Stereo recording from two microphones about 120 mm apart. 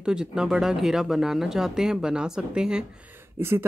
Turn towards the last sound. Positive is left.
turn(degrees=-20)  # may be behind; listen again after turning